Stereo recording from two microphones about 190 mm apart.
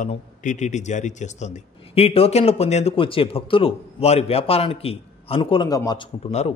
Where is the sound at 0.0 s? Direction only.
40° left (ahead or behind).